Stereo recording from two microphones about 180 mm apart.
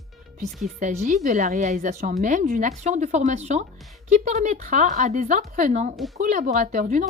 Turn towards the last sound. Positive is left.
turn(degrees=-45)  # may be behind; listen again after turning